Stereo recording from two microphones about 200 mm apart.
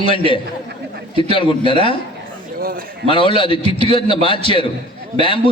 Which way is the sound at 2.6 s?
45° right (ahead or behind).